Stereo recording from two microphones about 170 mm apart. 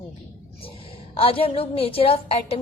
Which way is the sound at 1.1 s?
35° left (ahead or behind).